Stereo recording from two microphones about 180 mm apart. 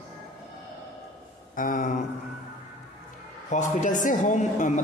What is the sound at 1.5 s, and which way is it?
Speech, 50° left (ahead or behind).